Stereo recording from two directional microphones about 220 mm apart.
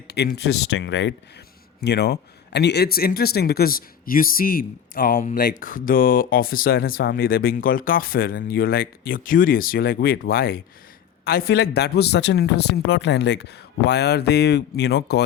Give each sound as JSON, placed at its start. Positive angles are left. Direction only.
{"t": 0.1, "sound": "speech", "side_deg": 45}